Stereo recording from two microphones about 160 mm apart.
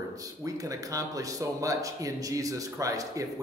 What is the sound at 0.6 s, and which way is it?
A man's voice, 20° right (ahead or behind).